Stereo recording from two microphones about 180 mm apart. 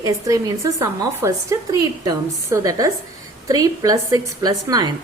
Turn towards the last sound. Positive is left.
turn(degrees=-20)  # may be behind; listen again after turning